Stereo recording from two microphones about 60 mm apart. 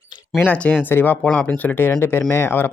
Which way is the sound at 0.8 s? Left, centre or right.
Left.